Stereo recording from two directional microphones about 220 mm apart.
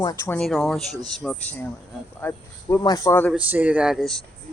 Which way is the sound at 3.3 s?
5° right (ahead or behind).